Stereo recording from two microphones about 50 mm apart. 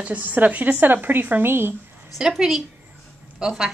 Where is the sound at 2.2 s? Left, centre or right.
Centre.